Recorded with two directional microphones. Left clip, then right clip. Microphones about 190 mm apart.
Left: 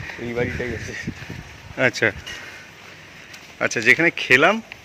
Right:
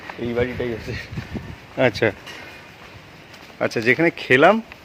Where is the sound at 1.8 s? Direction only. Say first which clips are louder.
Right 1 dB; 10° right (ahead or behind).